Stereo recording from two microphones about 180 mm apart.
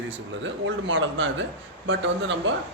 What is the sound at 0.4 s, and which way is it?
A man's voice, 90° right.